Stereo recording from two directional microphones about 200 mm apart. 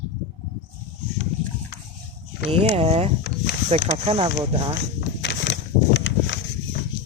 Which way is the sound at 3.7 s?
30° right (ahead or behind).